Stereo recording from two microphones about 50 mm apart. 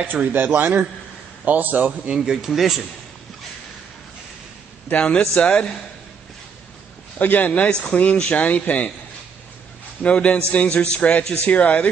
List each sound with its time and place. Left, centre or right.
0.0 s a man's voice: right
1.4 s a man's voice: right
2.1 s speech: centre
4.9 s a man's voice: centre
7.2 s a man's voice: left
10.0 s a man's voice: left